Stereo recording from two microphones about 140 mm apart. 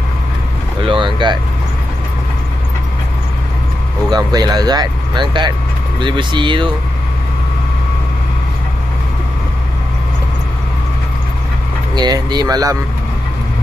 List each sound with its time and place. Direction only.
0.8 s vehicle: 35° right (ahead or behind)
4.1 s speech: 30° right (ahead or behind)
11.9 s speech: 30° right (ahead or behind)